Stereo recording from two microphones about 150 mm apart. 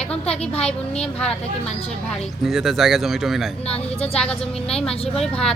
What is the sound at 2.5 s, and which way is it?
Speech, centre (ahead or behind).